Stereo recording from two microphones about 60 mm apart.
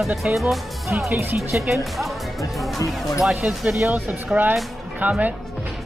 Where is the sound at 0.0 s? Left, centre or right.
Centre.